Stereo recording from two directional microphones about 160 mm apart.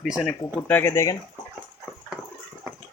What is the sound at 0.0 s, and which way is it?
Speech, centre (ahead or behind).